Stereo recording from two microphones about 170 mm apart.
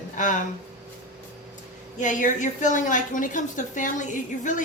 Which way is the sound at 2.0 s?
50° left (ahead or behind).